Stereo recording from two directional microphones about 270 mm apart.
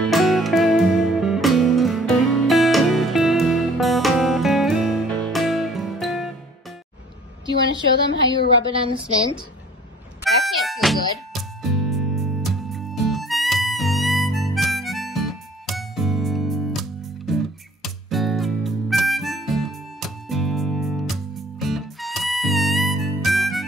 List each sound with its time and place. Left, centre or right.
0.0 s music: centre
8.7 s a woman's voice: centre
10.2 s music: centre
17.8 s music: centre